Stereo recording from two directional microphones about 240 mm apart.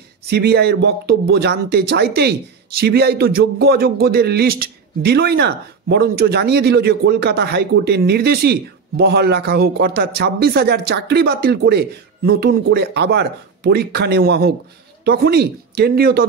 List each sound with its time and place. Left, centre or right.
0.3 s speech: right